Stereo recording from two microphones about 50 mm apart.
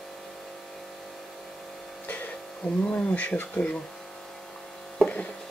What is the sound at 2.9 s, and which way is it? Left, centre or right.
Speech, left.